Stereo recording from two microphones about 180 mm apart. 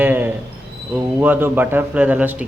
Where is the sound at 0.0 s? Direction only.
10° right (ahead or behind).